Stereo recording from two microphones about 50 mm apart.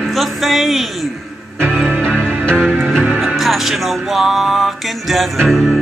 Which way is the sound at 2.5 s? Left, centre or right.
Right.